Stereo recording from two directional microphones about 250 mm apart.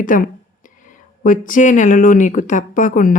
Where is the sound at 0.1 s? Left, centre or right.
Left.